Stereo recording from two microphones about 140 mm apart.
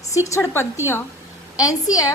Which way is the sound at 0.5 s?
20° left (ahead or behind).